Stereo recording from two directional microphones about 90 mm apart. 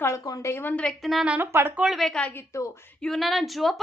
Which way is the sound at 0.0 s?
35° left (ahead or behind).